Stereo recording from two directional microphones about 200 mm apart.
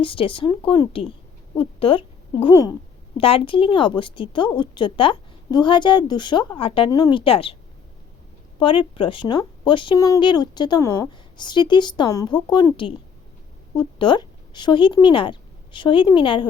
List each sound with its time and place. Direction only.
0.0 s a woman's voice: 25° left (ahead or behind)
8.5 s a woman's voice: 25° left (ahead or behind)